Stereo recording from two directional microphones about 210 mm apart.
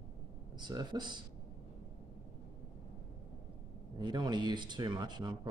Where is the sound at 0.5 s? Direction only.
20° right (ahead or behind).